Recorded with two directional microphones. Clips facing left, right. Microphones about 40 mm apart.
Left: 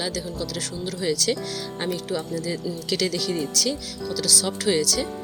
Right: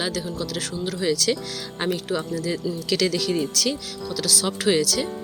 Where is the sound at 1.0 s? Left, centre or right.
Right.